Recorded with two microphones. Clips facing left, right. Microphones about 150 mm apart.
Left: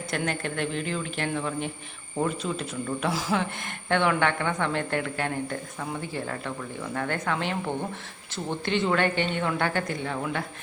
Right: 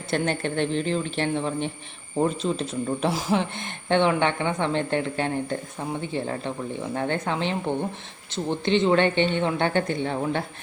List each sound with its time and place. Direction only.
0.1 s speech: 30° right (ahead or behind)